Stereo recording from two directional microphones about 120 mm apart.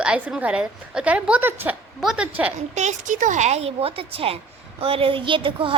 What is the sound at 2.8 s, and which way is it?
A woman's voice, 80° right.